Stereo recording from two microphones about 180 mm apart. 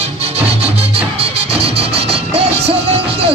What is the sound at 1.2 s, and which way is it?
Music, 35° right (ahead or behind).